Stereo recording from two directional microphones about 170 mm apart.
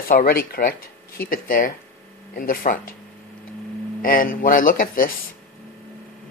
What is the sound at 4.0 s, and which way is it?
Speech, 55° left (ahead or behind).